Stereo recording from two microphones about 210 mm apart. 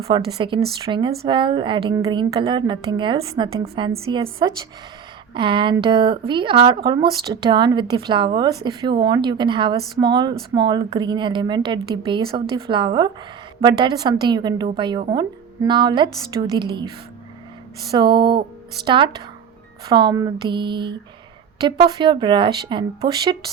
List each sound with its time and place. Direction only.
0.1 s speech: 25° right (ahead or behind)
17.9 s speech: 20° right (ahead or behind)